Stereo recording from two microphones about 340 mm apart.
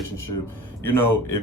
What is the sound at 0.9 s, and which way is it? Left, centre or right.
Speech, left.